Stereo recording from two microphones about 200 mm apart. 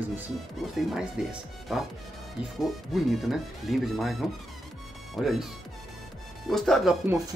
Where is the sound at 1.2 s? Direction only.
5° right (ahead or behind).